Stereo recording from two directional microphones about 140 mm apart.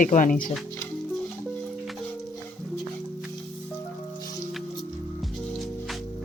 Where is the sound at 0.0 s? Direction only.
70° left (ahead or behind).